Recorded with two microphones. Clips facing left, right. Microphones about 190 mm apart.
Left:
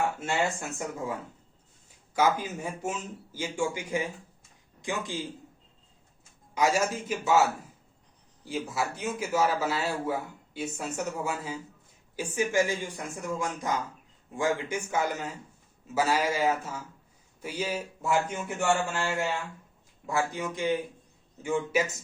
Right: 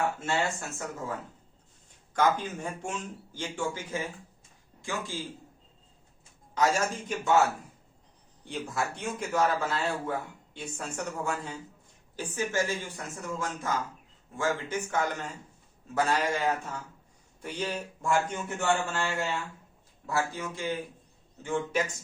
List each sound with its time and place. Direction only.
0.3 s a man's voice: 15° left (ahead or behind)
6.5 s speech: 10° left (ahead or behind)
8.4 s speech: 5° left (ahead or behind)